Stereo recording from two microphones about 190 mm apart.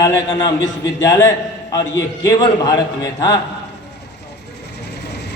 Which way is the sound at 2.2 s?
20° left (ahead or behind).